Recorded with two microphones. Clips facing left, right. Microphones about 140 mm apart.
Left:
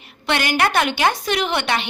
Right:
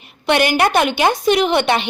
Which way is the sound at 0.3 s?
20° right (ahead or behind).